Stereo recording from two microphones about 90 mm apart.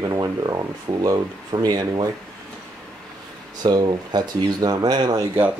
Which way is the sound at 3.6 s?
50° right (ahead or behind).